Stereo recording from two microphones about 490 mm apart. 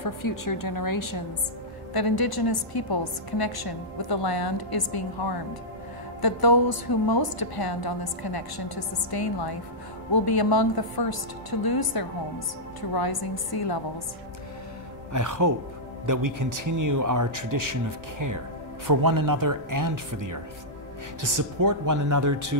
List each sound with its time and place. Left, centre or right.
0.0 s a woman's voice: left
15.1 s speech: right
18.9 s speech: right